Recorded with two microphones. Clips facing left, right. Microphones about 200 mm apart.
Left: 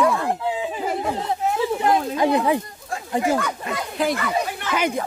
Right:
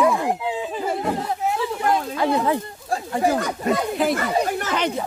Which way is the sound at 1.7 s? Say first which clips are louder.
Left 2 dB; 20° left (ahead or behind).